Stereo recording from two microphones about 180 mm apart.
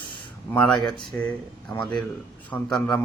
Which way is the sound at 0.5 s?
5° left (ahead or behind).